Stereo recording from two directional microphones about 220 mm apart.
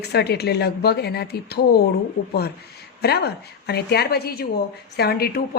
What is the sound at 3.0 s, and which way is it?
A woman's voice, 50° left (ahead or behind).